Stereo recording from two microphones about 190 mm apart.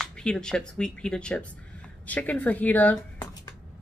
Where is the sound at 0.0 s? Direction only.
5° left (ahead or behind).